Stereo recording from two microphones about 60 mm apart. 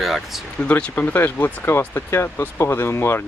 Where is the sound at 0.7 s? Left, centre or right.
Left.